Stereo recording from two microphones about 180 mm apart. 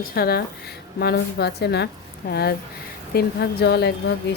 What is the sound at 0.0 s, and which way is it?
Speech, 55° left (ahead or behind).